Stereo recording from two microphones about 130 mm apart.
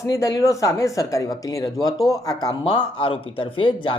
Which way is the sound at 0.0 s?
25° left (ahead or behind).